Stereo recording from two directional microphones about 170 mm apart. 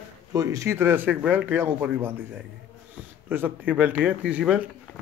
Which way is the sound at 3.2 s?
10° right (ahead or behind).